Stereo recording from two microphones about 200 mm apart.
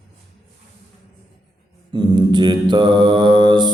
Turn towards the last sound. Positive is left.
turn(degrees=-20)  # may be behind; listen again after turning